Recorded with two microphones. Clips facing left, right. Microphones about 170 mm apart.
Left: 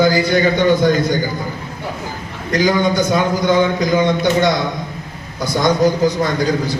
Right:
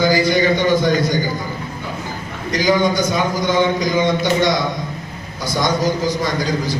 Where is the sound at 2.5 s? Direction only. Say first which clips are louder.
Left 1 dB; 60° left (ahead or behind).